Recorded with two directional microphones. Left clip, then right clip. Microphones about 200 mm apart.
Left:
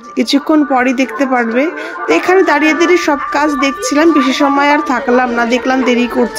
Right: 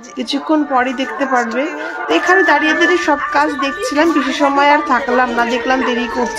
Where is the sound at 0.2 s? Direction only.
25° left (ahead or behind).